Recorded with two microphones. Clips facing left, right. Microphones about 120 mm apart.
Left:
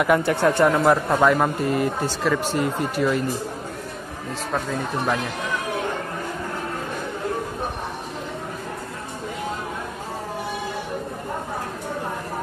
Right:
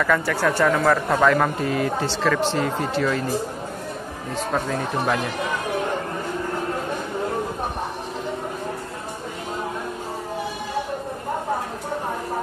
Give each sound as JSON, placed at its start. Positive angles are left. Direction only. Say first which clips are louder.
{"t": 0.0, "sound": "speech", "louder": "left 2 dB", "side_deg": 20}